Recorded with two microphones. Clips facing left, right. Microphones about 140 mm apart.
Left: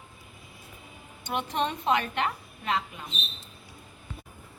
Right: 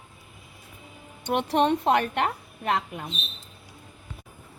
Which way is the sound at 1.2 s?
65° right (ahead or behind).